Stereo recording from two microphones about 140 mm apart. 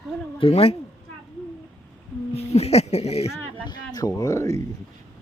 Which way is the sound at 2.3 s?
50° left (ahead or behind).